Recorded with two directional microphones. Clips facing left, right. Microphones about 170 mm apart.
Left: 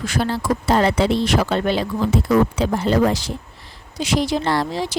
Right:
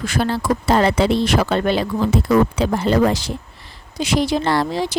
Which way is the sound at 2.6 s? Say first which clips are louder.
Right 1 dB; 80° right.